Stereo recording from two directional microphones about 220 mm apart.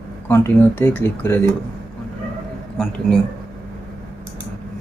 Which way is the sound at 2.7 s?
Centre (ahead or behind).